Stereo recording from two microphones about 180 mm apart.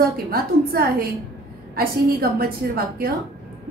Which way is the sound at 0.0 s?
55° right (ahead or behind).